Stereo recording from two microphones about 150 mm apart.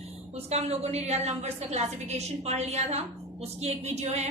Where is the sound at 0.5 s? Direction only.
45° right (ahead or behind).